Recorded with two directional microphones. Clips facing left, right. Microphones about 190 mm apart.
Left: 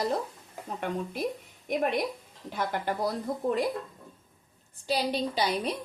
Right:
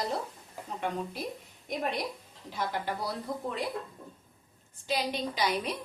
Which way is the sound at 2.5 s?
50° left (ahead or behind).